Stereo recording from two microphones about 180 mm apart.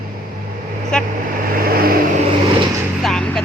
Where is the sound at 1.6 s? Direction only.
55° right (ahead or behind).